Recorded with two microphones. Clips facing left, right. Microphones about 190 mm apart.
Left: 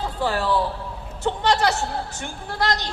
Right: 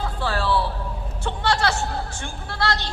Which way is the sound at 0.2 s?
15° left (ahead or behind).